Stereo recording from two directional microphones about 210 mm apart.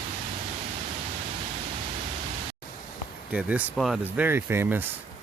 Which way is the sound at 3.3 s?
5° right (ahead or behind).